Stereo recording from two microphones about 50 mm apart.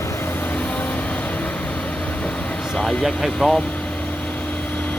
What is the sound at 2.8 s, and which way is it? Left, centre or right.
Speech, centre.